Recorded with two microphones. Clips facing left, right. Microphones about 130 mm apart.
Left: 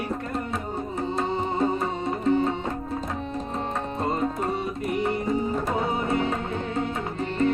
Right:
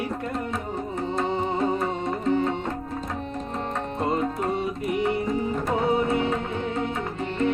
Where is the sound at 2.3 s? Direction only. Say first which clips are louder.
Even; 15° left (ahead or behind).